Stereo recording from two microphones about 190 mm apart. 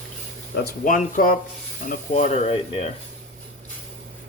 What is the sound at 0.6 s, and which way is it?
Speech, 45° left (ahead or behind).